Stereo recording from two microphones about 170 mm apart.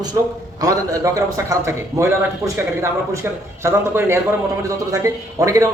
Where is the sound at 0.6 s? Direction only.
20° right (ahead or behind).